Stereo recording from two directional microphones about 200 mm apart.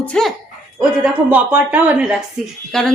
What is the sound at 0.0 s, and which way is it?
A woman's voice, 5° left (ahead or behind).